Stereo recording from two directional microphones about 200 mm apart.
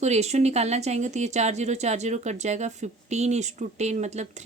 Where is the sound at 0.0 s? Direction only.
35° right (ahead or behind).